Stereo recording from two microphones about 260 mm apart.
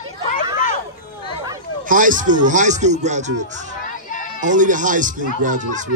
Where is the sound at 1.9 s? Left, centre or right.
Right.